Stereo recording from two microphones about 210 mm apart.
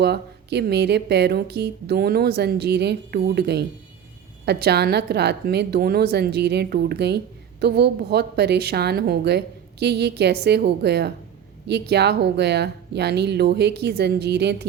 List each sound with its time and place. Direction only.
0.0 s a woman's voice: 50° right (ahead or behind)